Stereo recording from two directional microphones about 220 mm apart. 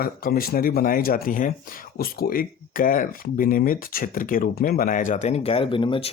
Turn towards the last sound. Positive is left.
turn(degrees=25)  # may be behind; listen again after turning